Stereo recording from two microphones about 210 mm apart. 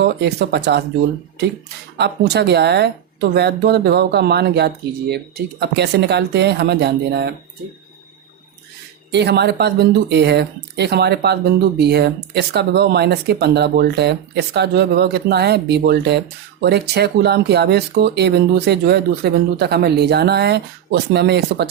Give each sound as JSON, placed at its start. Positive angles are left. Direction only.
{"t": 0.0, "sound": "speech", "side_deg": -55}
{"t": 2.0, "sound": "speech", "side_deg": -50}
{"t": 9.1, "sound": "speech", "side_deg": -50}